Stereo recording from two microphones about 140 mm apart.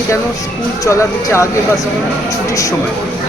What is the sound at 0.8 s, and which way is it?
Speech, 20° left (ahead or behind).